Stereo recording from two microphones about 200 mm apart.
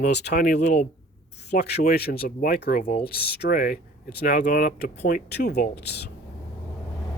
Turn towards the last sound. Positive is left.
turn(degrees=55)  # may be behind; listen again after turning